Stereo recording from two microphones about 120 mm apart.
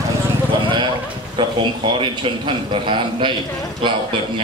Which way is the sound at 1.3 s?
40° right (ahead or behind).